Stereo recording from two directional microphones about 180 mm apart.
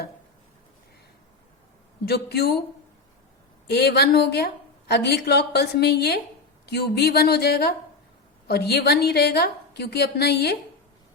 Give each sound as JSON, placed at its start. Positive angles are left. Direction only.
{"t": 2.0, "sound": "a woman's voice", "side_deg": 60}
{"t": 3.7, "sound": "a woman's voice", "side_deg": 65}